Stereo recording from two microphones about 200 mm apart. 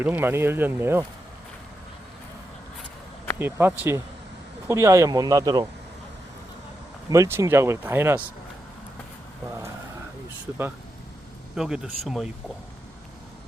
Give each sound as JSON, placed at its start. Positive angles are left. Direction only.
{"t": 0.0, "sound": "speech", "side_deg": -10}
{"t": 3.3, "sound": "speech", "side_deg": -10}
{"t": 7.1, "sound": "speech", "side_deg": -15}
{"t": 11.5, "sound": "speech", "side_deg": -5}